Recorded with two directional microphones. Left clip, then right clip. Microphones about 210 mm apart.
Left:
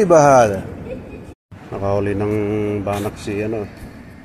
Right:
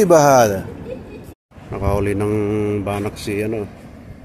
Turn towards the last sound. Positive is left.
turn(degrees=-15)  # may be behind; listen again after turning